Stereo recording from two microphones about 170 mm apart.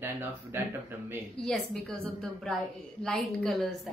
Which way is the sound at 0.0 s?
15° right (ahead or behind).